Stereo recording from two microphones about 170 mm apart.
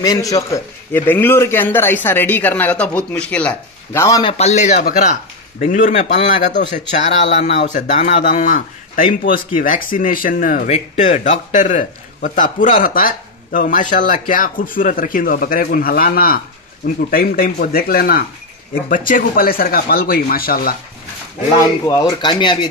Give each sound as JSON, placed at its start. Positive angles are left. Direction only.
{"t": 0.0, "sound": "a man's voice", "side_deg": 20}
{"t": 4.2, "sound": "speech", "side_deg": 35}
{"t": 21.5, "sound": "speech", "side_deg": 20}